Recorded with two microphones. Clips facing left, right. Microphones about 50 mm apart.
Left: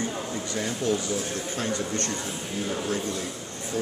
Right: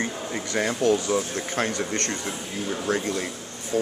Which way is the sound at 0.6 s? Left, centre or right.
Right.